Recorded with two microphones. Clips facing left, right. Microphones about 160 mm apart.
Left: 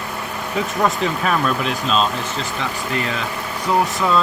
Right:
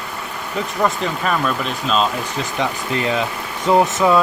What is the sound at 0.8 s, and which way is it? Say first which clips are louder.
Speech: even; centre (ahead or behind).